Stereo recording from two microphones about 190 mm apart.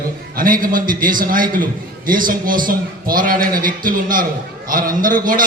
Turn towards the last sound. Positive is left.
turn(degrees=-45)  # may be behind; listen again after turning